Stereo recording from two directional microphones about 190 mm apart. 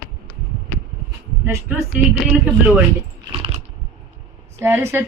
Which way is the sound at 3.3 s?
30° right (ahead or behind).